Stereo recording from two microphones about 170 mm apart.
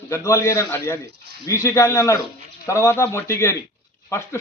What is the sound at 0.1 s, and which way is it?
Speech, 15° left (ahead or behind).